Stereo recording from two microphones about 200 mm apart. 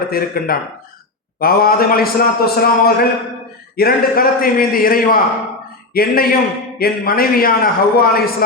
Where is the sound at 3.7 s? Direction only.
45° left (ahead or behind).